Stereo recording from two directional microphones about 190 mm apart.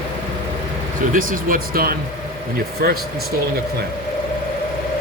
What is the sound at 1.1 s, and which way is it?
Speech, 45° right (ahead or behind).